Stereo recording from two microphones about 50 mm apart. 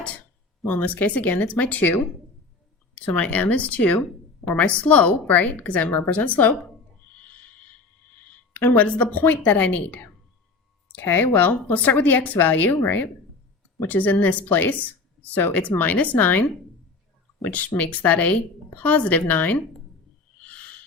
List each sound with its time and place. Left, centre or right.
0.7 s a woman's voice: left
3.2 s a woman's voice: left
7.2 s a sound: left
8.3 s speech: left
11.0 s a woman's voice: left
20.4 s owl: left